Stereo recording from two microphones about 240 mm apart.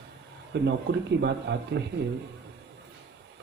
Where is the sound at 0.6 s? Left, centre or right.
Right.